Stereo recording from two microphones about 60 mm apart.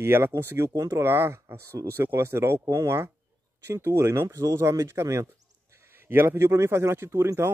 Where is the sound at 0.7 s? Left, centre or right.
Right.